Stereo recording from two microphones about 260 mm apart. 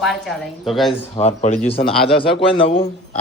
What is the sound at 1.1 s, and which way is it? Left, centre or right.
A man's voice, left.